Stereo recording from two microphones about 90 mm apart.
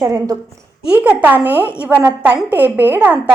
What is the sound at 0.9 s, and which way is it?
A woman's voice, 15° right (ahead or behind).